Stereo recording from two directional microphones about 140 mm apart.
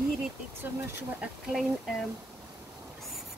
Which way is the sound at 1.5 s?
5° right (ahead or behind).